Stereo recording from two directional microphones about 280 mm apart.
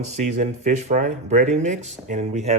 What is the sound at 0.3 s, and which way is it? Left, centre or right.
Speech, right.